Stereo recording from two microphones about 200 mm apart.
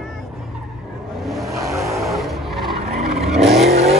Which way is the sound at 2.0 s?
Centre (ahead or behind).